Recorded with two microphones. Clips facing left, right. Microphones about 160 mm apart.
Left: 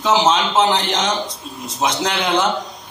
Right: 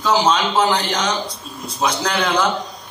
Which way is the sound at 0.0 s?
25° left (ahead or behind).